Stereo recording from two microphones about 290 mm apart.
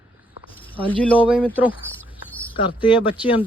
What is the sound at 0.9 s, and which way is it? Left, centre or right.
Speech, centre.